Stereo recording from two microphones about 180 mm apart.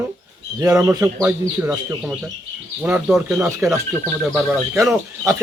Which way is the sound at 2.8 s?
5° right (ahead or behind).